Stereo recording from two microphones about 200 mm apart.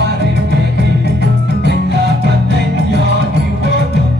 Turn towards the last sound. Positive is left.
turn(degrees=-55)  # may be behind; listen again after turning